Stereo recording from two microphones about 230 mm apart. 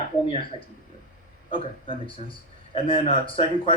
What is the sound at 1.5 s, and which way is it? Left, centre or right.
A man's voice, left.